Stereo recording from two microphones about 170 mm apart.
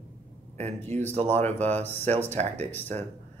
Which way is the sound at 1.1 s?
40° right (ahead or behind).